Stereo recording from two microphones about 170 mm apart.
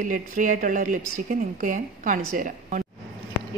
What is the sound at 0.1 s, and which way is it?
A woman's voice, 50° right (ahead or behind).